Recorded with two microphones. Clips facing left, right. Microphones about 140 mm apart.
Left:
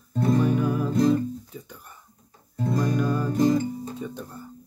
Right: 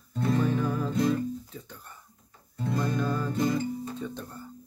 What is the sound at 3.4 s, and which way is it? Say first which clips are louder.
Music: left 8 dB; 40° left (ahead or behind).